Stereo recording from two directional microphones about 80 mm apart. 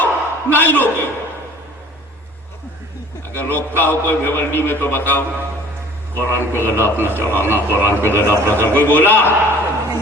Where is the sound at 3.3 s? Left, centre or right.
Left.